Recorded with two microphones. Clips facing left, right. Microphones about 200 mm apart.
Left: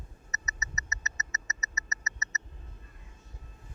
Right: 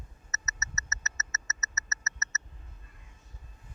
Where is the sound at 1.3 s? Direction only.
15° left (ahead or behind).